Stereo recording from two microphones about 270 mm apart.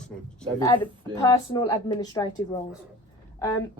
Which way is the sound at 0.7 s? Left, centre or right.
Centre.